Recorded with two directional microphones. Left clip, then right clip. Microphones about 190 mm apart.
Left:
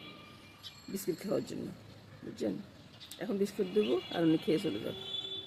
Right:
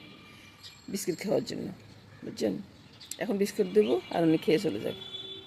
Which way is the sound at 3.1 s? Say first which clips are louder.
Right 5 dB; 30° right (ahead or behind).